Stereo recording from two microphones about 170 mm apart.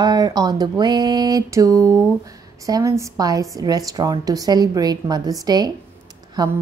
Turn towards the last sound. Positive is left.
turn(degrees=-25)  # may be behind; listen again after turning